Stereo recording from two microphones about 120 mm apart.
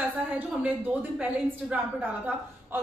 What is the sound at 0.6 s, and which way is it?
A woman's voice, 10° right (ahead or behind).